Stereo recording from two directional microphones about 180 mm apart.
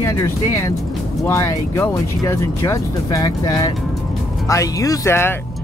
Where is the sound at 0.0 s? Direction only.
20° left (ahead or behind).